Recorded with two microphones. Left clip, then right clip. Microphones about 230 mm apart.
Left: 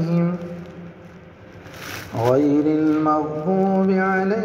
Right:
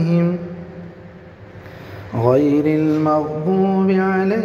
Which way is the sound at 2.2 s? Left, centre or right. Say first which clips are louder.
Right 2 dB; right.